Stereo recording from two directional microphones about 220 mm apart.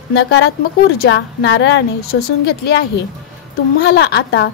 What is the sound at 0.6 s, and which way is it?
A woman's voice, 45° left (ahead or behind).